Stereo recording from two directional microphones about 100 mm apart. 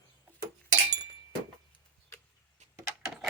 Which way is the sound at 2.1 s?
30° left (ahead or behind).